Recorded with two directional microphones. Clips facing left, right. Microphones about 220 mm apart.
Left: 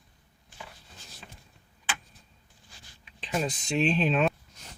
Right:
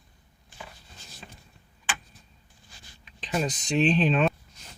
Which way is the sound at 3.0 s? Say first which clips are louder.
Right 2 dB; 5° left (ahead or behind).